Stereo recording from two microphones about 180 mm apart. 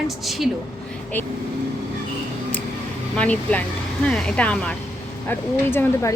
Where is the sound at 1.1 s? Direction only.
10° left (ahead or behind).